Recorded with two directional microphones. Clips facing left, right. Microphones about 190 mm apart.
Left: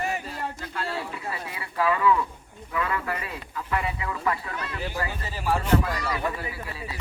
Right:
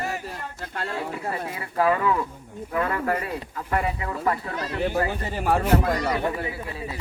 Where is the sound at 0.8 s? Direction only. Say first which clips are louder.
Right 4 dB; 50° right (ahead or behind).